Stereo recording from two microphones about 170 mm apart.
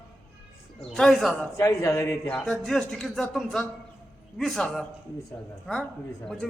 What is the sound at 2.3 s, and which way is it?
A man's voice, centre (ahead or behind).